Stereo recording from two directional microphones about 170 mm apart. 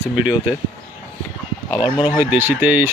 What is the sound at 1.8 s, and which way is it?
Speech, 25° left (ahead or behind).